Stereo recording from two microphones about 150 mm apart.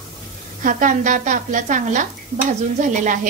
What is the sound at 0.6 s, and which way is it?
A woman's voice, 60° right (ahead or behind).